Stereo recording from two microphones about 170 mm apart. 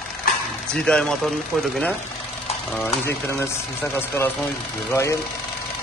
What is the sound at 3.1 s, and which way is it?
Speech, 15° left (ahead or behind).